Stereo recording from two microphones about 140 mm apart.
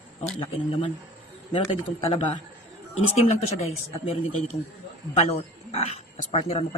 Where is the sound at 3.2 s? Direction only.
50° left (ahead or behind).